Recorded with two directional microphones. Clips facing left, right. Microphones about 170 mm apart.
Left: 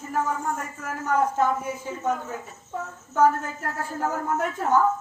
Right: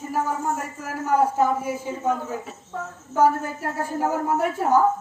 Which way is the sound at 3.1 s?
10° right (ahead or behind).